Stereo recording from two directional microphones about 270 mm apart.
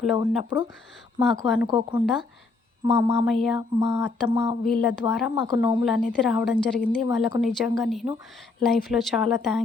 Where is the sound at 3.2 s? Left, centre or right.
Centre.